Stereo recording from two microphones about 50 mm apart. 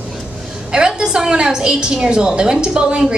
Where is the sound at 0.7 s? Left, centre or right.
Centre.